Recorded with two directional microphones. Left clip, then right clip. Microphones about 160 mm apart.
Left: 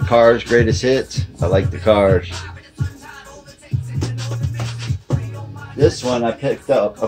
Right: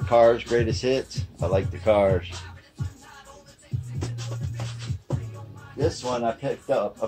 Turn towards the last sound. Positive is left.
turn(degrees=25)  # may be behind; listen again after turning